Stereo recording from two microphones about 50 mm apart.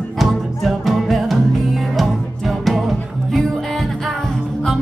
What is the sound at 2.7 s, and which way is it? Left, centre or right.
Music, centre.